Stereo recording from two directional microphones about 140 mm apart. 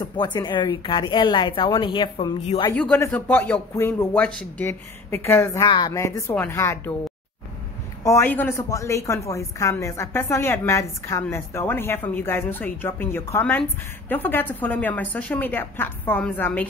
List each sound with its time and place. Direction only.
0.0 s a woman's voice: 35° left (ahead or behind)
2.7 s a woman's voice: 10° left (ahead or behind)
8.0 s a woman's voice: 20° left (ahead or behind)